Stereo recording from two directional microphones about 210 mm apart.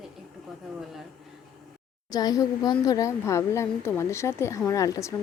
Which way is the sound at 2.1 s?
15° left (ahead or behind).